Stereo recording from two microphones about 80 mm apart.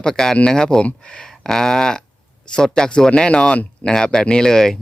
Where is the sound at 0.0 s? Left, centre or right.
Centre.